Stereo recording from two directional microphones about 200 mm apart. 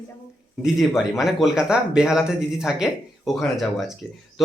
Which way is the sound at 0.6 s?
Centre (ahead or behind).